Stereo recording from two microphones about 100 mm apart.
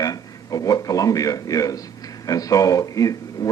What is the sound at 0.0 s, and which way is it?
A man's voice, 35° left (ahead or behind).